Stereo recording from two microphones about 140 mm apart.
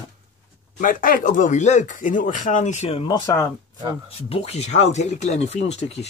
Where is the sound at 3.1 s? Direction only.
30° left (ahead or behind).